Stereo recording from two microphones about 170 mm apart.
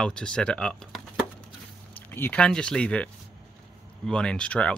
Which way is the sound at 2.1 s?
10° left (ahead or behind).